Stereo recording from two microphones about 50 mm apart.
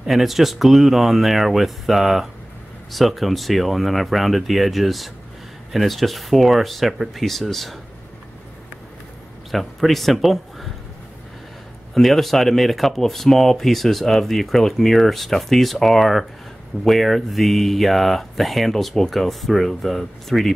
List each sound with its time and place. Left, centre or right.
0.0 s speech: centre
9.5 s speech: centre
11.9 s speech: centre